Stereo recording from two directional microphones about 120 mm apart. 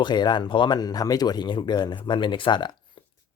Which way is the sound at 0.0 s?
40° left (ahead or behind).